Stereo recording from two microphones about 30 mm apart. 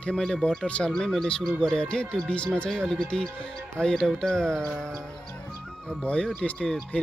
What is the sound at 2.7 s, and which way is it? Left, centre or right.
Speech, centre.